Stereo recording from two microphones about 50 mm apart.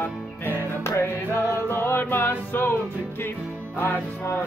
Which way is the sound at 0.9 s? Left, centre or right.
Left.